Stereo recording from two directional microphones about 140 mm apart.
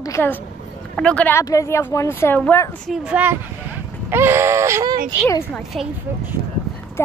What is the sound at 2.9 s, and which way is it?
Speech, 10° right (ahead or behind).